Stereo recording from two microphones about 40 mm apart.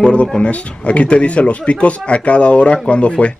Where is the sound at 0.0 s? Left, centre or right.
Left.